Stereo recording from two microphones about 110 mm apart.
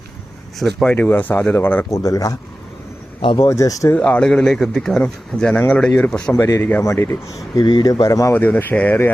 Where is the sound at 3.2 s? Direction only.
50° left (ahead or behind).